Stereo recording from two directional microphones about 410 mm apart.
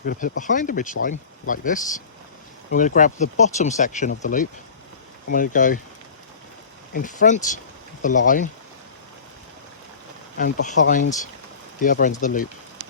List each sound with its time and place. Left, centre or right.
0.0 s speech: left
6.9 s speech: centre
10.3 s speech: centre